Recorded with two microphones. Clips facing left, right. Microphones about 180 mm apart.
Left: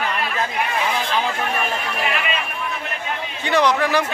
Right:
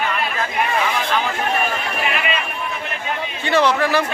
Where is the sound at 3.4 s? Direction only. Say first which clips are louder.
Right 1 dB; 15° left (ahead or behind).